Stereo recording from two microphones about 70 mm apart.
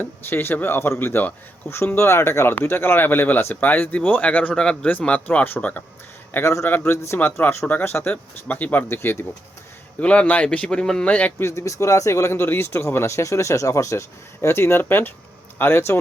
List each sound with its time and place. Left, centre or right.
0.0 s speech: left
6.3 s speech: left
8.9 s speech: left
10.0 s a man's voice: centre
11.1 s speech: left
11.4 s speech: left
14.4 s speech: left